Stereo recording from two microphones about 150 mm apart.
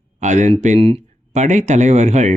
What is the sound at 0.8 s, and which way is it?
Speech, 40° right (ahead or behind).